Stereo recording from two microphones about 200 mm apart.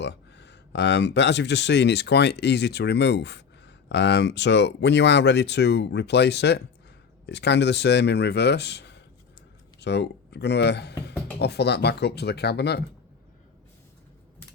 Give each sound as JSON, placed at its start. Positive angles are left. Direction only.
{"t": 0.0, "sound": "speech", "side_deg": 60}